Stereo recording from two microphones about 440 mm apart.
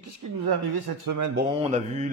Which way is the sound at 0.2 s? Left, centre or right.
Right.